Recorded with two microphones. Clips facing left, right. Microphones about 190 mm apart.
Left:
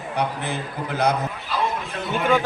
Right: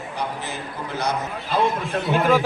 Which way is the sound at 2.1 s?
5° right (ahead or behind).